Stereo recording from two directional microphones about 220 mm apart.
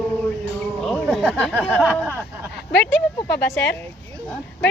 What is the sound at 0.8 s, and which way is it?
Speech, centre (ahead or behind).